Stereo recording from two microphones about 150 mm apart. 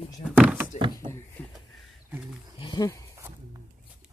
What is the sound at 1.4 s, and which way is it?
Speech, 10° left (ahead or behind).